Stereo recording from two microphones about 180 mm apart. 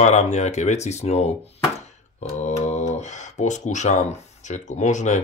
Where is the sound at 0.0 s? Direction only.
40° left (ahead or behind).